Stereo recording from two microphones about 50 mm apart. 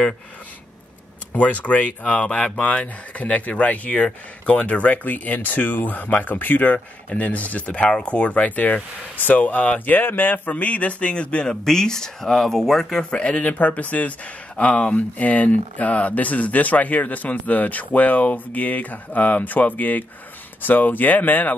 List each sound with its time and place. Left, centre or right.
1.3 s speech: left
11.6 s speech: centre
13.2 s speech: left